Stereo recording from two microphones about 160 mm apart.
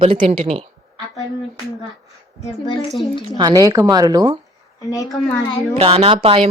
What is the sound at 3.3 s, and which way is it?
Speech, 25° right (ahead or behind).